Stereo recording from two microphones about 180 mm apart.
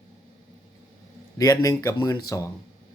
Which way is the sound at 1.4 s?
20° left (ahead or behind).